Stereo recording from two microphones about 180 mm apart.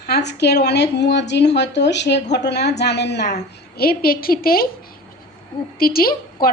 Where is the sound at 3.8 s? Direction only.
55° left (ahead or behind).